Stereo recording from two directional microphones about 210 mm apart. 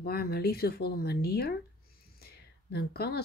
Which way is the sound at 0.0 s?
50° left (ahead or behind).